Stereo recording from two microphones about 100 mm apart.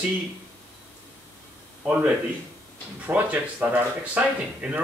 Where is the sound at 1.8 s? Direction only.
15° right (ahead or behind).